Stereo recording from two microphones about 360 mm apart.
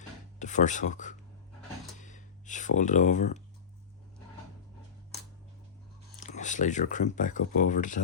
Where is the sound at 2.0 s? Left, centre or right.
Left.